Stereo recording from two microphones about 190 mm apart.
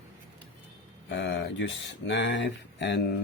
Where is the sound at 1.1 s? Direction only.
65° left (ahead or behind).